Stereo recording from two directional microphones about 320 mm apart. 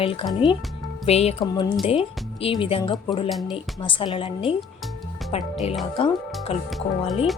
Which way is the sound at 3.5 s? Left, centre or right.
Centre.